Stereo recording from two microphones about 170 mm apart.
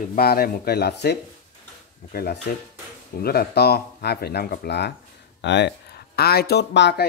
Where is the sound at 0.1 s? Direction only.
65° left (ahead or behind).